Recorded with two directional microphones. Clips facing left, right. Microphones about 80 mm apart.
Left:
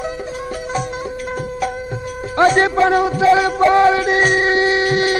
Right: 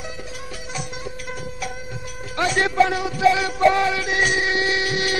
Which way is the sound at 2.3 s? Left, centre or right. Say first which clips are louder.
Left 5 dB; left.